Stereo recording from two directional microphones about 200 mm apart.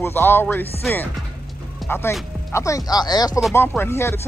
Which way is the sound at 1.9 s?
10° left (ahead or behind).